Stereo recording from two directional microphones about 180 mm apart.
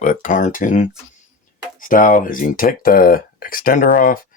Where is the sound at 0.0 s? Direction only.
45° left (ahead or behind).